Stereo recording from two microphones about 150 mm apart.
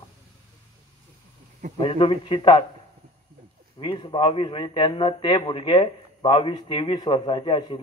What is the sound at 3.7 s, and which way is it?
A man's voice, 30° left (ahead or behind).